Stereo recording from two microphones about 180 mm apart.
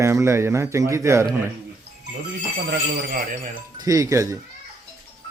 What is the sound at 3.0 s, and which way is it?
Speech, 55° right (ahead or behind).